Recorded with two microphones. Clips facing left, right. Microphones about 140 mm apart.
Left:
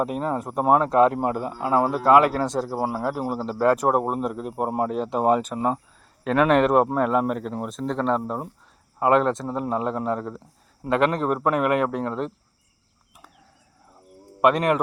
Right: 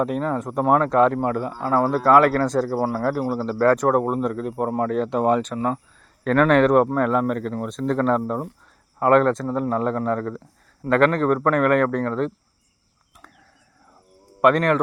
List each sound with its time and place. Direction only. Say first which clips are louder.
0.3 s speech: even; 5° left (ahead or behind)
1.1 s speech: right 2 dB; 20° left (ahead or behind)
5.5 s speech: even; 15° left (ahead or behind)
6.2 s speech: right 2 dB; 5° left (ahead or behind)
14.4 s speech: right 2 dB; 5° left (ahead or behind)